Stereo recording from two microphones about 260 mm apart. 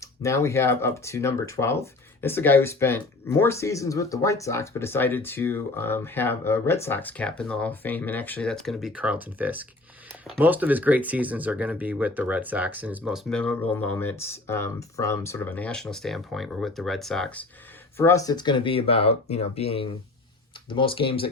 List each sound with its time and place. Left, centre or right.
0.0 s speech: centre